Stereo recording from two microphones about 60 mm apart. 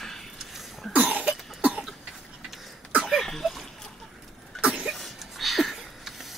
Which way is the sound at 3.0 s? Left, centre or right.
Centre.